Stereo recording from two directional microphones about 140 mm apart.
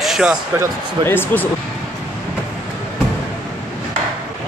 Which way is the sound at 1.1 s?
15° left (ahead or behind).